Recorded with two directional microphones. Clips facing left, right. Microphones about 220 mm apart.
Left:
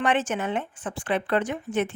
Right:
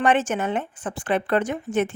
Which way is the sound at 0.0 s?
45° right (ahead or behind).